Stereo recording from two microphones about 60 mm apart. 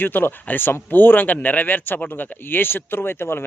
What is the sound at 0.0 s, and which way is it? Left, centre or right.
Speech, left.